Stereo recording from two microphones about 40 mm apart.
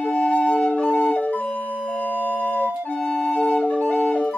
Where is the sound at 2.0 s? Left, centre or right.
Right.